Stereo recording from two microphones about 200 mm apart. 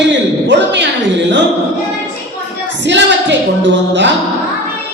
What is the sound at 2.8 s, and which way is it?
A man's voice, 60° right (ahead or behind).